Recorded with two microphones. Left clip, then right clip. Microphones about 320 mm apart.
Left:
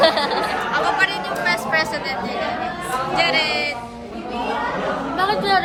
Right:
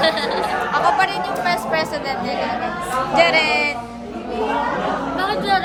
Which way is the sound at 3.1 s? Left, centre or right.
Centre.